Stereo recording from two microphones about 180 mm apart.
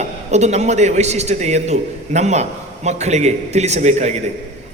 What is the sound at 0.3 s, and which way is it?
A man's voice, 40° right (ahead or behind).